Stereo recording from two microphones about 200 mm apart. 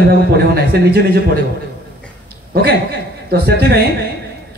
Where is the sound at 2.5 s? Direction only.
50° right (ahead or behind).